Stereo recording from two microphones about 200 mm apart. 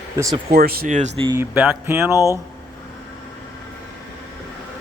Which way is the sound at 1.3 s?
10° right (ahead or behind).